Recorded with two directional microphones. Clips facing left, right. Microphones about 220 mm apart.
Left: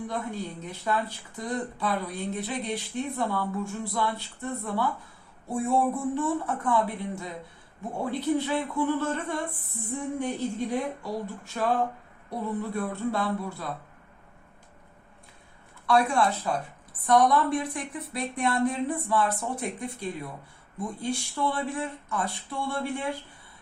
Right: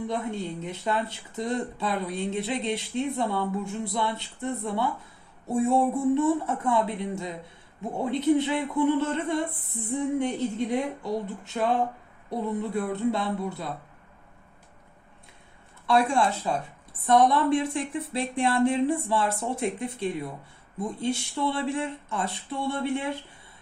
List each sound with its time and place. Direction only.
0.1 s speech: 25° right (ahead or behind)
15.9 s speech: 25° right (ahead or behind)